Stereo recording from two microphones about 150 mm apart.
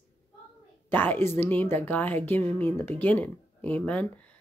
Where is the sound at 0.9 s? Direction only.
15° left (ahead or behind).